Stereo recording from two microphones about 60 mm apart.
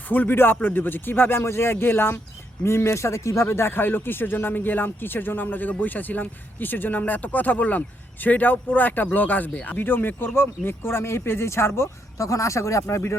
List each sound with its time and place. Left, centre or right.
0.1 s speech: left
2.6 s speech: left
11.8 s speech: left
12.8 s speech: left